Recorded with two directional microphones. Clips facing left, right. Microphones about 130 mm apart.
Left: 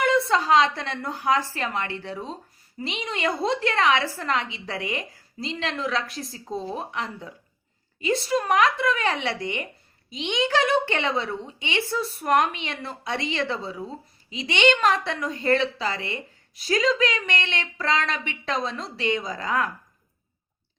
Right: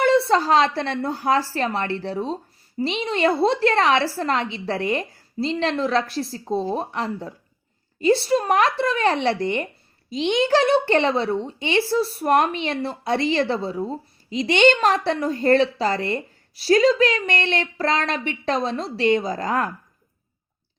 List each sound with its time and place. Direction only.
0.0 s a woman's voice: 30° right (ahead or behind)